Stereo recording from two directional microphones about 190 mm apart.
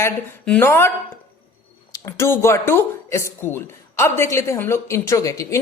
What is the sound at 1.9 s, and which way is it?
Speech, 15° left (ahead or behind).